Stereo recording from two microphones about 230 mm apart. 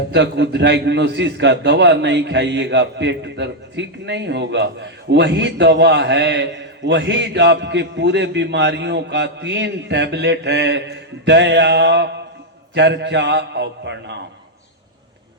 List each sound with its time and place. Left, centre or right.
0.1 s a man's voice: right